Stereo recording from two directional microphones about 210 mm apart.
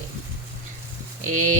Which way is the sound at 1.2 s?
35° right (ahead or behind).